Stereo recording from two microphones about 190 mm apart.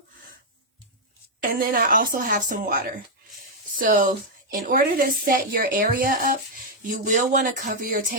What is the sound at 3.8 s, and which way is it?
Speech, 45° right (ahead or behind).